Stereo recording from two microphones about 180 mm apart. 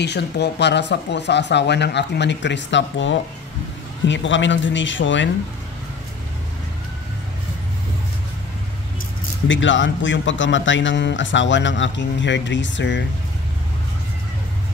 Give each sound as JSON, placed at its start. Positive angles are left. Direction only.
{"t": 0.0, "sound": "speech", "side_deg": 70}
{"t": 9.5, "sound": "speech", "side_deg": 90}